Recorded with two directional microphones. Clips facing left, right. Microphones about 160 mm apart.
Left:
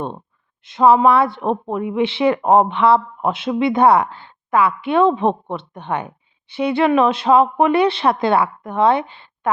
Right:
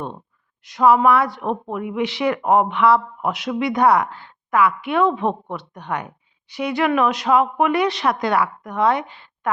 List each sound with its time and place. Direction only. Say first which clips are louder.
0.6 s speech: left 2 dB; 25° left (ahead or behind)